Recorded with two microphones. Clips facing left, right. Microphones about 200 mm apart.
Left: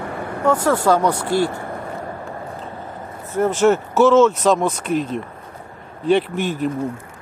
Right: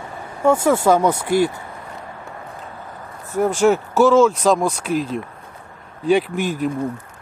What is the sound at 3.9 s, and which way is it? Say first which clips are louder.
Speech: left 1 dB; 10° right (ahead or behind).